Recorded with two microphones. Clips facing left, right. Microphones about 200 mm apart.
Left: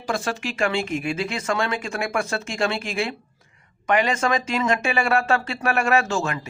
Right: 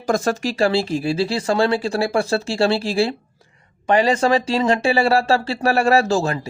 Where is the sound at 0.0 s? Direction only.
45° right (ahead or behind).